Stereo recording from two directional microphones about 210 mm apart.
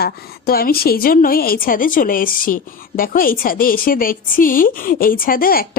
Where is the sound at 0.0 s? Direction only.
45° left (ahead or behind).